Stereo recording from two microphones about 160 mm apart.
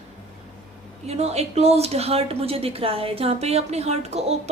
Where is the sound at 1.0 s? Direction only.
40° right (ahead or behind).